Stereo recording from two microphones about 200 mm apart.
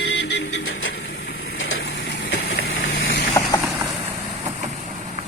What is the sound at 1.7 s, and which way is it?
Vehicle, 65° left (ahead or behind).